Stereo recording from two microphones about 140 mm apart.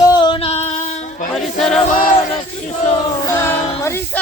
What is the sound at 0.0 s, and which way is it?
Singing, 30° left (ahead or behind).